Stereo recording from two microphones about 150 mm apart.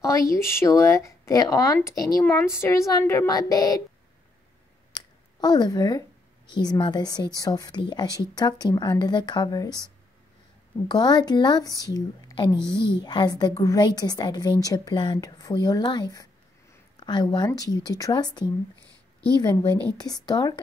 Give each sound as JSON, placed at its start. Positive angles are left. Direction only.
{"t": 0.0, "sound": "speech", "side_deg": 20}
{"t": 4.9, "sound": "a sound", "side_deg": 30}
{"t": 6.5, "sound": "speech", "side_deg": 30}
{"t": 10.9, "sound": "speech", "side_deg": 30}
{"t": 19.7, "sound": "speech", "side_deg": 10}
{"t": 20.2, "sound": "speech", "side_deg": 25}